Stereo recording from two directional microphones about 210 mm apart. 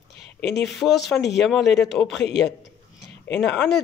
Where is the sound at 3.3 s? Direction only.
5° left (ahead or behind).